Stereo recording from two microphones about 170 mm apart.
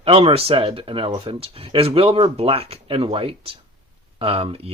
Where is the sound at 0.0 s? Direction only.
35° right (ahead or behind).